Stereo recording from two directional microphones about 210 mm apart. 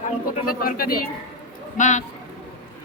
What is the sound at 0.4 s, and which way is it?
Speech, 45° left (ahead or behind).